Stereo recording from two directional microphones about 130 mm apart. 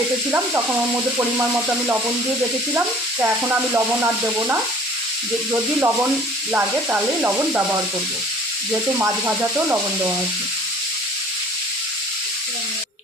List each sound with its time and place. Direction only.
0.3 s speech: 20° right (ahead or behind)
1.4 s frying: 15° right (ahead or behind)
5.5 s speech: 20° right (ahead or behind)
6.5 s frying: 15° right (ahead or behind)
8.9 s frying: 20° right (ahead or behind)